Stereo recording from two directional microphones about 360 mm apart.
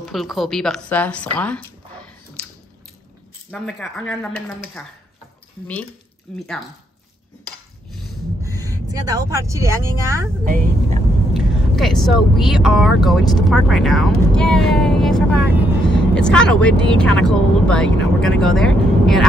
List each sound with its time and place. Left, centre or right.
0.0 s speech: centre
3.4 s speech: centre
6.3 s speech: centre
7.9 s vehicle: centre
10.4 s a woman's voice: right
11.3 s speech: centre